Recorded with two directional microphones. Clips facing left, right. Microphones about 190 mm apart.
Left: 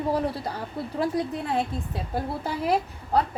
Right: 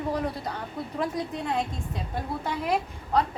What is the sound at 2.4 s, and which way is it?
Speech, 35° left (ahead or behind).